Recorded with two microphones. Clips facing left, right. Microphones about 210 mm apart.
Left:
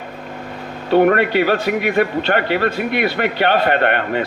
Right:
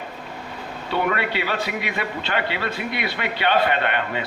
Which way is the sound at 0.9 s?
50° left (ahead or behind).